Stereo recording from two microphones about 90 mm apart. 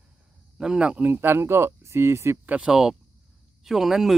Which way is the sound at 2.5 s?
10° right (ahead or behind).